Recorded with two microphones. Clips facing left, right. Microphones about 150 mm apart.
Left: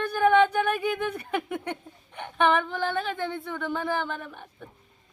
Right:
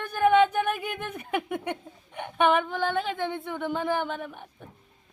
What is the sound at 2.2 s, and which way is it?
Speech, 15° right (ahead or behind).